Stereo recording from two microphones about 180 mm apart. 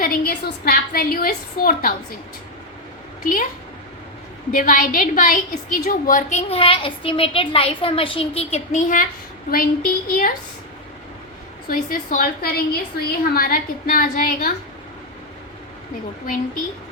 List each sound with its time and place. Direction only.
0.0 s a woman's voice: 55° left (ahead or behind)
4.5 s a woman's voice: 50° left (ahead or behind)
6.5 s a woman's voice: 30° left (ahead or behind); by 10.3 s 50° left (ahead or behind)
11.7 s a woman's voice: 50° left (ahead or behind)